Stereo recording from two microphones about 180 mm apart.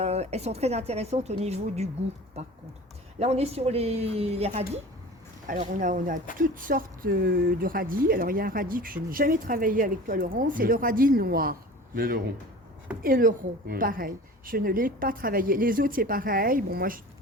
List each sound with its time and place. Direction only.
0.0 s a woman's voice: 35° right (ahead or behind)
3.2 s a woman's voice: 35° right (ahead or behind)
5.5 s speech: 45° right (ahead or behind)